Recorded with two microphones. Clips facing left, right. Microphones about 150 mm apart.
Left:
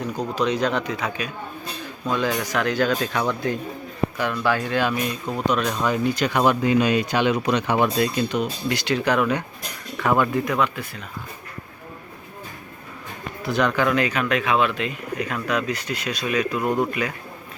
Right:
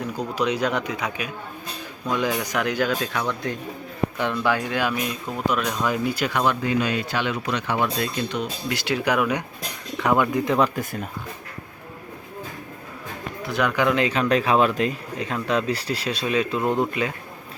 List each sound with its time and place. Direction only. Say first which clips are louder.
0.3 s speech: left 1 dB; 10° right (ahead or behind)
4.2 s speech: even; 20° right (ahead or behind); by 6.4 s 5° right (ahead or behind)
6.4 s speech: left 5 dB; 15° left (ahead or behind)
8.3 s speech: left 4 dB; 10° left (ahead or behind)
8.7 s speech: left 1 dB; 5° right (ahead or behind)
10.8 s speech: right 5 dB; 45° right (ahead or behind)
13.4 s speech: left 2 dB; centre (ahead or behind)
13.7 s speech: even; 20° right (ahead or behind)